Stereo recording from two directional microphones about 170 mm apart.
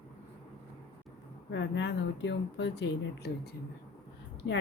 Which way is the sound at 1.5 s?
90° left.